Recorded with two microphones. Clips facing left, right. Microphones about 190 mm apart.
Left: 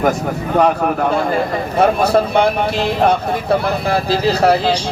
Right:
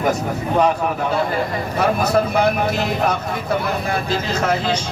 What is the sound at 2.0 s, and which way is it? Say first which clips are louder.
A man's voice: left 3 dB; 30° left (ahead or behind).